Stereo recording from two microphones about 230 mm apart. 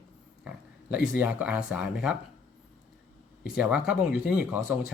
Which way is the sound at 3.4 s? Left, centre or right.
Centre.